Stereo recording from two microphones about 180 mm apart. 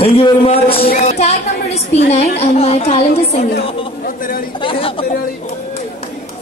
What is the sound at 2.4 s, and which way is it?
A man's voice, 35° left (ahead or behind).